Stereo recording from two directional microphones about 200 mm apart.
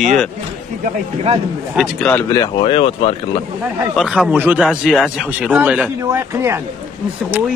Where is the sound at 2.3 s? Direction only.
20° left (ahead or behind).